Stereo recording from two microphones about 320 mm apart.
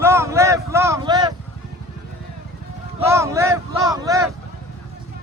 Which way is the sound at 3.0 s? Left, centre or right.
Centre.